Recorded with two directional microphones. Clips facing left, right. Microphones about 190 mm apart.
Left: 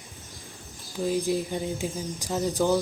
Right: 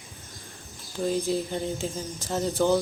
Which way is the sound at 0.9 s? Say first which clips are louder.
Even; 5° left (ahead or behind).